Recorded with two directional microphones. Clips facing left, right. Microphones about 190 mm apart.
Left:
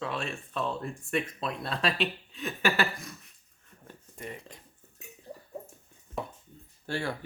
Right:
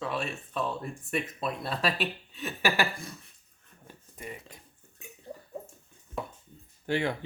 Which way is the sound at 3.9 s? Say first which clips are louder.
Left 1 dB; 10° right (ahead or behind).